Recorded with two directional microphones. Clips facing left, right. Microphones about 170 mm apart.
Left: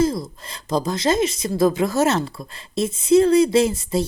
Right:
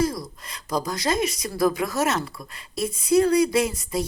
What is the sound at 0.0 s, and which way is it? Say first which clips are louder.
Speech: left 4 dB; 25° left (ahead or behind).